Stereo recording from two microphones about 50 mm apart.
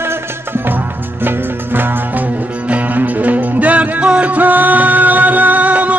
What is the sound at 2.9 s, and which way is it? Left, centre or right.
Music, right.